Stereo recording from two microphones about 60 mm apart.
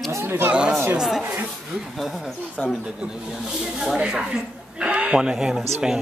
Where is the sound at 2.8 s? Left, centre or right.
Centre.